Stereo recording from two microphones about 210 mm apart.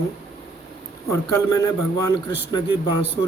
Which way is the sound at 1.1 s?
15° left (ahead or behind).